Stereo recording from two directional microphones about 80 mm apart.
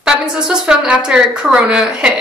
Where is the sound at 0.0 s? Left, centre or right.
Centre.